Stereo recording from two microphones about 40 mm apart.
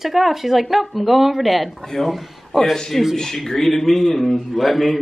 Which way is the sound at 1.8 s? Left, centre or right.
Centre.